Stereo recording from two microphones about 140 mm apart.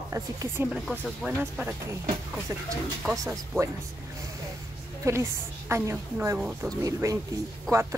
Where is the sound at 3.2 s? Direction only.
20° right (ahead or behind).